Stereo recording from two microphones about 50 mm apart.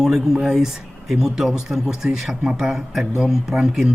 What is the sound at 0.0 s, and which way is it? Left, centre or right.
Speech, centre.